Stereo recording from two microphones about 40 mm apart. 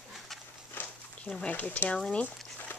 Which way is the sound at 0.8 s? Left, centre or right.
Left.